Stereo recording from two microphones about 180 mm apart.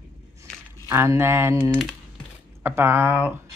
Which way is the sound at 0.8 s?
15° right (ahead or behind).